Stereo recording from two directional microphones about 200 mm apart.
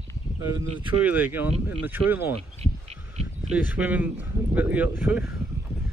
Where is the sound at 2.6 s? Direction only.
35° right (ahead or behind).